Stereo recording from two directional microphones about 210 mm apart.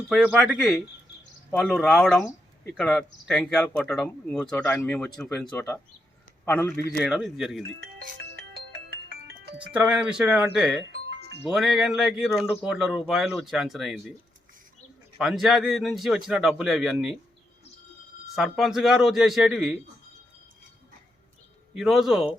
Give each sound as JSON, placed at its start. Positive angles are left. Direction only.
{"t": 0.2, "sound": "a man's voice", "side_deg": -5}
{"t": 7.0, "sound": "speech", "side_deg": 0}
{"t": 8.2, "sound": "music", "side_deg": -55}
{"t": 9.6, "sound": "speech", "side_deg": -5}
{"t": 15.2, "sound": "speech", "side_deg": 0}
{"t": 18.3, "sound": "speech", "side_deg": 0}
{"t": 21.8, "sound": "speech", "side_deg": 0}